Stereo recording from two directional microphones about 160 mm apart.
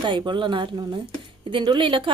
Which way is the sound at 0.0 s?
30° right (ahead or behind).